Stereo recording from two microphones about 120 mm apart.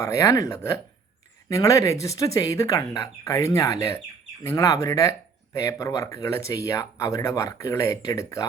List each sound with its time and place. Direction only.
0.0 s speech: 25° left (ahead or behind)